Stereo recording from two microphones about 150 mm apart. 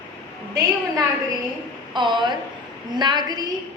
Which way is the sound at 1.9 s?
30° right (ahead or behind).